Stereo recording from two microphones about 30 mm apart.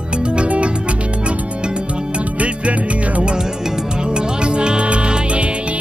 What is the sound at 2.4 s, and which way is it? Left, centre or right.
Music, right.